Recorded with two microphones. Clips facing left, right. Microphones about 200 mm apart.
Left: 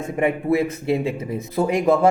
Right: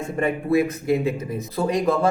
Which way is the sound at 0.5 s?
25° left (ahead or behind).